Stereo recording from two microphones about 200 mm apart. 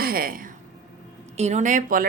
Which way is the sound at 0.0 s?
45° right (ahead or behind).